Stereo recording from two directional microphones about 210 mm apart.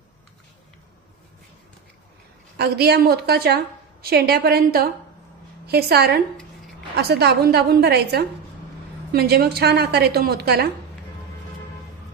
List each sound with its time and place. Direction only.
2.5 s a woman's voice: 50° right (ahead or behind)